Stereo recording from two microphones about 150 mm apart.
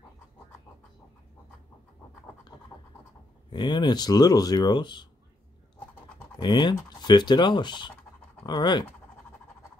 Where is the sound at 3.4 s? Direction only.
30° left (ahead or behind).